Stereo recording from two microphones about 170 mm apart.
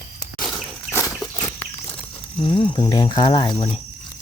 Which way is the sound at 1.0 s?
20° left (ahead or behind).